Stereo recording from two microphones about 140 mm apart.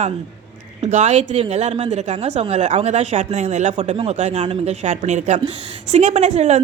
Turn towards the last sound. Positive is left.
turn(degrees=-50)  # may be behind; listen again after turning